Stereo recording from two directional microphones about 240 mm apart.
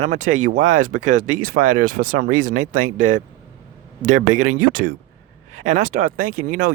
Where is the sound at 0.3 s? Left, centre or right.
Right.